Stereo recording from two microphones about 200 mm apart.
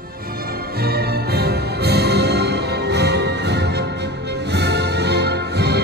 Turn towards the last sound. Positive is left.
turn(degrees=-55)  # may be behind; listen again after turning